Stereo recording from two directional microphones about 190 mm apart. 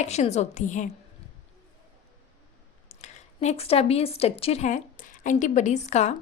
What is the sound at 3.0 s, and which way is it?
A woman's voice, 35° left (ahead or behind).